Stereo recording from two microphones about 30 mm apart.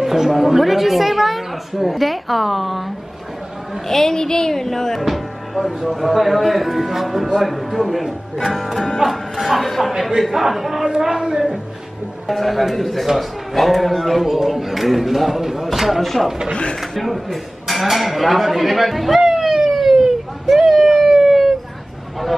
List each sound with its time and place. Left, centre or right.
0.0 s a woman's voice: centre
3.9 s speech: centre
5.0 s music: centre
5.9 s a woman's voice: centre
10.9 s speech: centre
12.3 s a woman's voice: centre
14.2 s a woman's voice: centre
16.0 s a woman's voice: centre
19.3 s police car: centre
20.4 s a sound: centre